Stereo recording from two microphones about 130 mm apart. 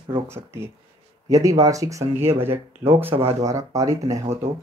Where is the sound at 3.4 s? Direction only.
25° right (ahead or behind).